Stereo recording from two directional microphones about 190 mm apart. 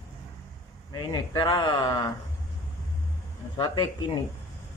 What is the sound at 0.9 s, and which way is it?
Speech, 20° left (ahead or behind).